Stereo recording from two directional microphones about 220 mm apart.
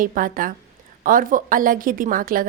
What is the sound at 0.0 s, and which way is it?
A woman's voice, 40° right (ahead or behind).